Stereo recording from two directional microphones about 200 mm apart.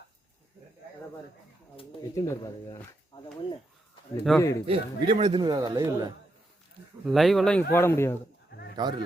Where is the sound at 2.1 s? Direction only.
15° left (ahead or behind).